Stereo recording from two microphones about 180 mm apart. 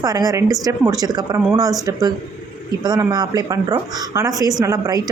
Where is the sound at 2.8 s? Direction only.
20° right (ahead or behind).